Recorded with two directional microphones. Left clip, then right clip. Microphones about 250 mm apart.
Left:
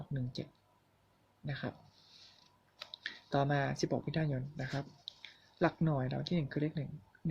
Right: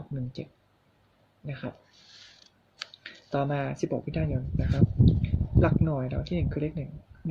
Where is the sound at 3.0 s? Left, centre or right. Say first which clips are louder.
Right 4 dB; centre.